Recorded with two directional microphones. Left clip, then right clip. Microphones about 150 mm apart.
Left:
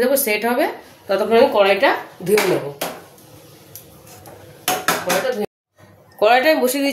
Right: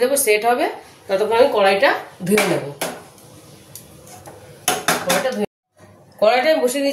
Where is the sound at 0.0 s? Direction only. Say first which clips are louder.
Right 1 dB; 35° left (ahead or behind).